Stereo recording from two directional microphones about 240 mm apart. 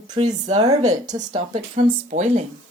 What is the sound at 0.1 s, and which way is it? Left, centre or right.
Speech, right.